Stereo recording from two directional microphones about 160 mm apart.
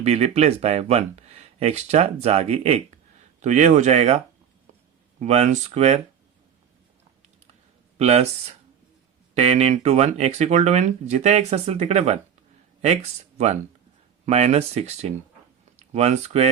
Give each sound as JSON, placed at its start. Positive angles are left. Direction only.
{"t": 0.0, "sound": "speech", "side_deg": -40}
{"t": 5.2, "sound": "speech", "side_deg": -45}
{"t": 7.9, "sound": "speech", "side_deg": -40}
{"t": 14.3, "sound": "speech", "side_deg": -45}